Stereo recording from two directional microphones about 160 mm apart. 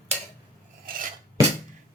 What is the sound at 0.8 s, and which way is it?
Filing, 60° right (ahead or behind).